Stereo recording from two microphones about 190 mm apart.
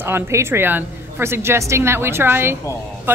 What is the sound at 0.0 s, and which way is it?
Speech, 15° right (ahead or behind).